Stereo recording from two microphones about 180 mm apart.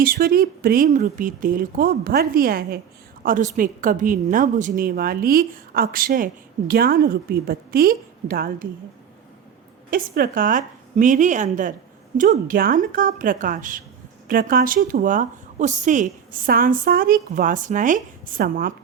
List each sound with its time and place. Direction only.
0.0 s a woman's voice: 55° right (ahead or behind)
3.2 s a woman's voice: 45° right (ahead or behind)
9.9 s a woman's voice: 50° right (ahead or behind)